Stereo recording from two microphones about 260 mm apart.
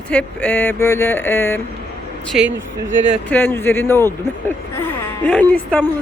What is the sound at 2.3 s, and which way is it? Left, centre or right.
Speech, centre.